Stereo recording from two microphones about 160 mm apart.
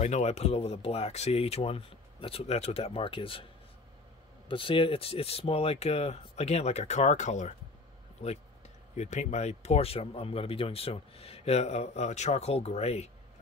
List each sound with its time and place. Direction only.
0.0 s speech: 45° left (ahead or behind)
4.5 s speech: 35° left (ahead or behind)